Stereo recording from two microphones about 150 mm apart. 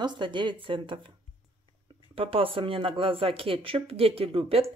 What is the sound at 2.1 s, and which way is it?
Speech, 35° right (ahead or behind).